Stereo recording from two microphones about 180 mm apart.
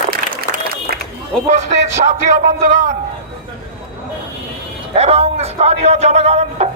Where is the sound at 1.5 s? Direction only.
40° right (ahead or behind).